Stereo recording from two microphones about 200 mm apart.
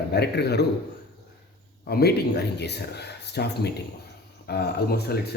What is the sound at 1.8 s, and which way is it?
Speech, 50° left (ahead or behind).